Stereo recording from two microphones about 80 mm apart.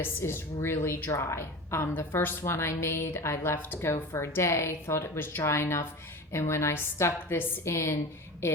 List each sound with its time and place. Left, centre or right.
0.0 s a woman's voice: left
1.1 s a woman's voice: left